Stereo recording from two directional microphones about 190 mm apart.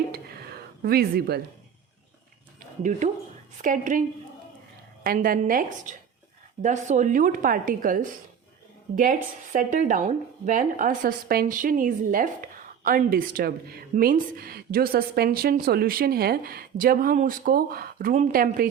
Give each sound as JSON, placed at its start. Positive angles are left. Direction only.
{"t": 0.1, "sound": "a sound", "side_deg": -55}
{"t": 3.6, "sound": "speech", "side_deg": -45}
{"t": 5.0, "sound": "speech", "side_deg": -50}